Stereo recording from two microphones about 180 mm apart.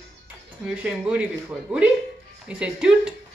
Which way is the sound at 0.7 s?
5° right (ahead or behind).